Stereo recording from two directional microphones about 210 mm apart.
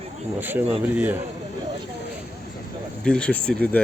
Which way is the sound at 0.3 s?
10° right (ahead or behind).